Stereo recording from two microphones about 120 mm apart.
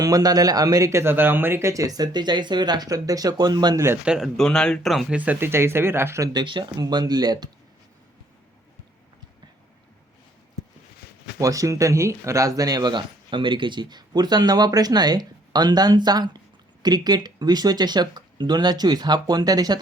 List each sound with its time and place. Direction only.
0.0 s speech: 30° right (ahead or behind)
4.0 s speech: 5° right (ahead or behind)
4.4 s speech: 5° left (ahead or behind)
5.1 s speech: 15° right (ahead or behind)
6.4 s speech: 40° right (ahead or behind)
11.3 s speech: 30° right (ahead or behind)